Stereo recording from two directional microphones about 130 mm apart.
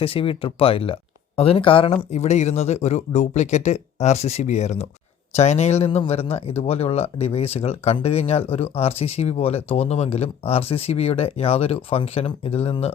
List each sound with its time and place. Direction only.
0.0 s speech: 45° left (ahead or behind)
2.0 s speech: 60° left (ahead or behind)